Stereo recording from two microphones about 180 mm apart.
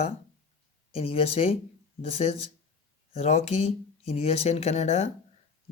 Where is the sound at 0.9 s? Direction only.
30° left (ahead or behind).